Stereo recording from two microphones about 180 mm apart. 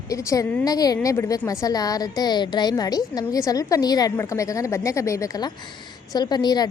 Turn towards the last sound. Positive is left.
turn(degrees=20)  # may be behind; listen again after turning